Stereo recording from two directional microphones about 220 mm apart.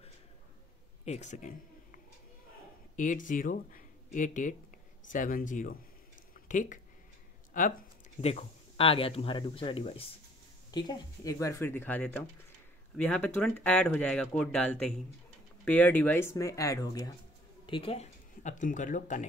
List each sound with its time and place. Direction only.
1.0 s speech: 30° left (ahead or behind)
3.0 s speech: 35° left (ahead or behind)
6.3 s a sound: 35° left (ahead or behind)
7.5 s speech: 35° left (ahead or behind)